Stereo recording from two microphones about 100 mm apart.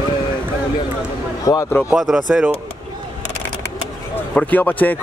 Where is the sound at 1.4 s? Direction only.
35° left (ahead or behind).